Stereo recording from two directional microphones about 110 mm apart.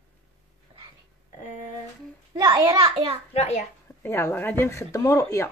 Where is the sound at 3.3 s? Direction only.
80° left.